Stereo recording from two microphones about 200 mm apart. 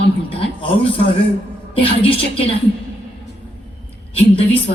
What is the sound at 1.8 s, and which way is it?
Speech, 30° left (ahead or behind).